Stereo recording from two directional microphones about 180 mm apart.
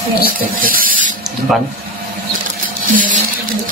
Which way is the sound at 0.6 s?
50° right (ahead or behind).